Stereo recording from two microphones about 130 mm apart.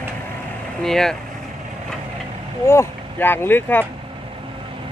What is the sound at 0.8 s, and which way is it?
Speech, 5° left (ahead or behind).